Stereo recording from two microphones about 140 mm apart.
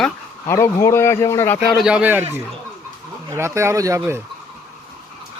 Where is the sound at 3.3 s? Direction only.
20° right (ahead or behind).